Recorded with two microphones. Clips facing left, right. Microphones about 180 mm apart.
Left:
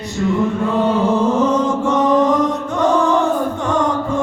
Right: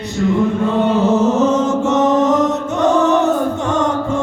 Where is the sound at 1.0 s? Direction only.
25° right (ahead or behind).